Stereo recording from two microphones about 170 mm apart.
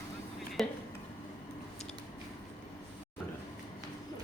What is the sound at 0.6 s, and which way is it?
Speech, centre (ahead or behind).